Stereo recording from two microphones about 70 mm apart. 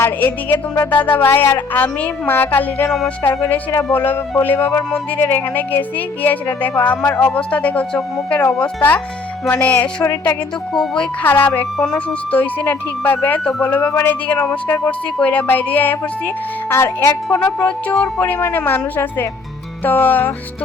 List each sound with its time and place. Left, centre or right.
0.0 s a woman's voice: left
10.0 s speech: left
11.8 s a woman's voice: centre
16.6 s speech: left
17.3 s a woman's voice: left